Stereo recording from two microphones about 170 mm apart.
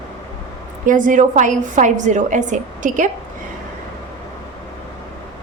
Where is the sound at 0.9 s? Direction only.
50° right (ahead or behind).